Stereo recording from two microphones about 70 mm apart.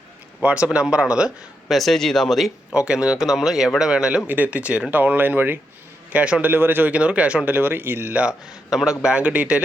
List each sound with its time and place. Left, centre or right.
0.4 s a man's voice: centre
1.6 s speech: centre
2.7 s a man's voice: centre
4.3 s speech: right
6.1 s a man's voice: centre
6.5 s speech: right
8.1 s a man's voice: centre